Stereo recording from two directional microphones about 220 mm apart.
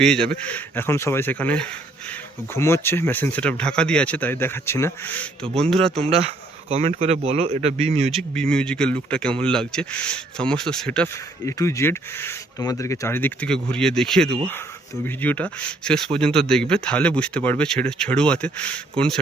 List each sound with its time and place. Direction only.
0.0 s speech: 5° left (ahead or behind)
6.0 s speech: 25° right (ahead or behind)
8.1 s speech: 5° left (ahead or behind)